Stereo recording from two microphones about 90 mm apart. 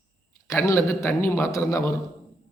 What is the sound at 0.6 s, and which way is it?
A man's voice, 35° left (ahead or behind).